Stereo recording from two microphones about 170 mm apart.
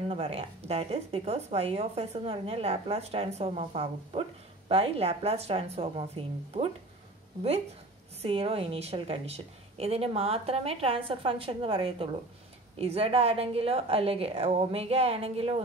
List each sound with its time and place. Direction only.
0.1 s speech: 35° right (ahead or behind)
8.2 s speech: 35° right (ahead or behind)